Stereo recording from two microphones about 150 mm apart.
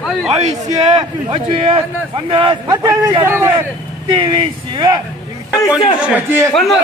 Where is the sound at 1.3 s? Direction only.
35° right (ahead or behind); by 3.6 s 15° right (ahead or behind).